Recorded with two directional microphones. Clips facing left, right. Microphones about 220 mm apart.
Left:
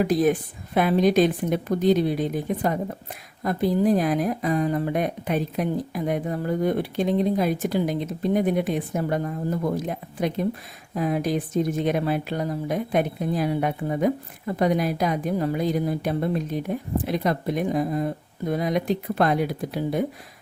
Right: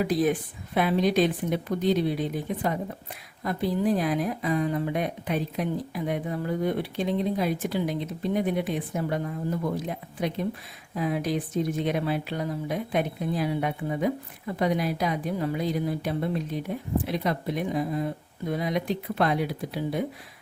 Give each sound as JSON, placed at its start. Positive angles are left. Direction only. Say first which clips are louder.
{"t": 0.0, "sound": "a woman's voice", "louder": "left 4 dB", "side_deg": 45}